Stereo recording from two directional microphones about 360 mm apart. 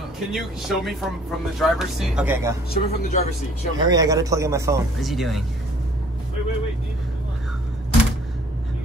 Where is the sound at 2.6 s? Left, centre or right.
Left.